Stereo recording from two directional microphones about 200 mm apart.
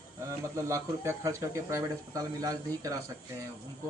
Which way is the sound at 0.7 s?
15° right (ahead or behind).